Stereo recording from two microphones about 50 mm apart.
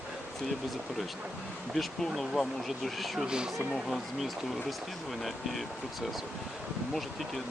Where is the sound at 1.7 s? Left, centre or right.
Centre.